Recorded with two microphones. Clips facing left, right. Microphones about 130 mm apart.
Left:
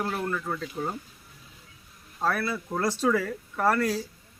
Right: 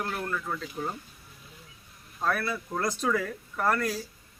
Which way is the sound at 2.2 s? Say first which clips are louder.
Left 1 dB; 30° left (ahead or behind).